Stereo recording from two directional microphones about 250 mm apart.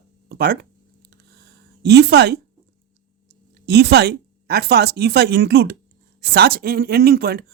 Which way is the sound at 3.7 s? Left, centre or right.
Right.